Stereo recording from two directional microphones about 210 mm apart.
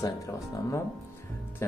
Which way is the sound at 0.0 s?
15° left (ahead or behind).